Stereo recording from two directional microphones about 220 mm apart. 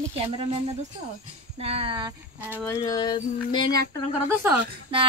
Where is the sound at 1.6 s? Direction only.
25° right (ahead or behind).